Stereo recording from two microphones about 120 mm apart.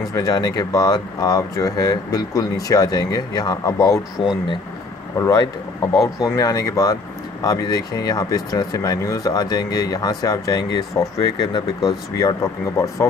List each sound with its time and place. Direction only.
0.1 s speech: 30° left (ahead or behind)
5.1 s speech: 25° left (ahead or behind)